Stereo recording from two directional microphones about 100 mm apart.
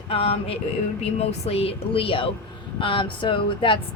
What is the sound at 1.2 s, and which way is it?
Speech, 90° left.